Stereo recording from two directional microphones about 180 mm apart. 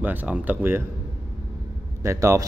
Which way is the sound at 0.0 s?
10° right (ahead or behind).